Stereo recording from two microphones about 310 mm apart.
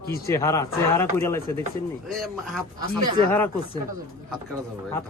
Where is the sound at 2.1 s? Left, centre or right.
Centre.